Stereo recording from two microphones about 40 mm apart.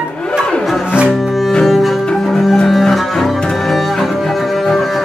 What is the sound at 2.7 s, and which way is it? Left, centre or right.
Double bass, centre.